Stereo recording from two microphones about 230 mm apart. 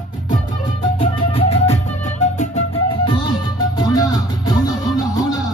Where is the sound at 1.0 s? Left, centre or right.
Left.